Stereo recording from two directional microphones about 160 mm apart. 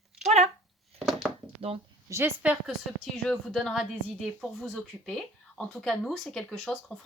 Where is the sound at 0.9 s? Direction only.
Centre (ahead or behind).